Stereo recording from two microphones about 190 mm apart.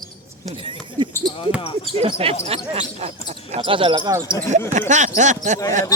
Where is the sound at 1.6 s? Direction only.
30° left (ahead or behind).